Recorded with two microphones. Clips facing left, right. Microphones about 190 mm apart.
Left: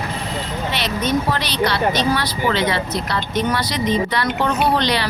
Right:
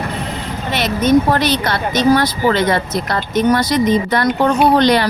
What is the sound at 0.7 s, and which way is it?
Speech, 50° right (ahead or behind).